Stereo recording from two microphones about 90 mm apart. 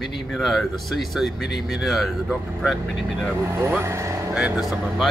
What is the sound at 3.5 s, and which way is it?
Speech, 30° right (ahead or behind).